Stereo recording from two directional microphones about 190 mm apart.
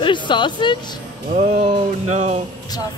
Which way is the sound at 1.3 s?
30° right (ahead or behind).